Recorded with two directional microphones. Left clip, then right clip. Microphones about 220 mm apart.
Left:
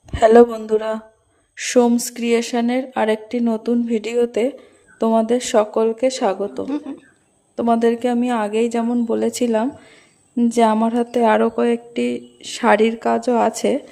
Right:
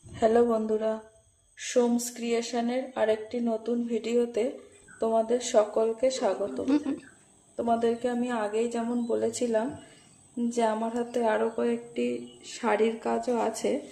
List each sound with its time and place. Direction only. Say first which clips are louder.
0.1 s speech: left 12 dB; 50° left (ahead or behind)
6.7 s speech: left 1 dB; centre (ahead or behind)
7.5 s speech: left 9 dB; 50° left (ahead or behind)